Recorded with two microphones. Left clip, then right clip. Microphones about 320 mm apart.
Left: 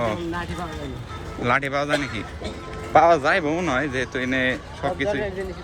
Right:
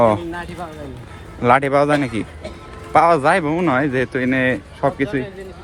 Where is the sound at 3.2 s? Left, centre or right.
Centre.